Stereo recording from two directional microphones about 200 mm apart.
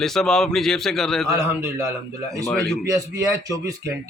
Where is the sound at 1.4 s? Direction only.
15° right (ahead or behind).